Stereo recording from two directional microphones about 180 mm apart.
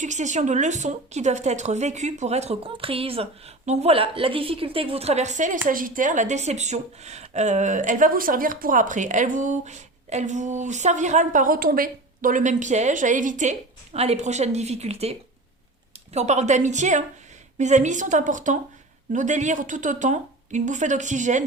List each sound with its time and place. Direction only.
0.0 s a woman's voice: 40° right (ahead or behind)